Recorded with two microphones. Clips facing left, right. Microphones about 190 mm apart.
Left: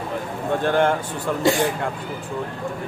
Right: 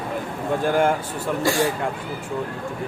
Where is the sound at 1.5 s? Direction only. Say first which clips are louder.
Left 4 dB; 20° left (ahead or behind).